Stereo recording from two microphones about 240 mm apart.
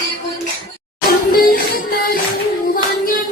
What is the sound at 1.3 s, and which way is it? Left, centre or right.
Music, left.